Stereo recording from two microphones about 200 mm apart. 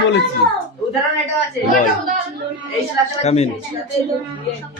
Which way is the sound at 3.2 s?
30° left (ahead or behind).